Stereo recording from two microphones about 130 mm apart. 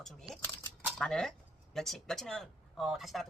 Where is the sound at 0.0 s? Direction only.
Centre (ahead or behind).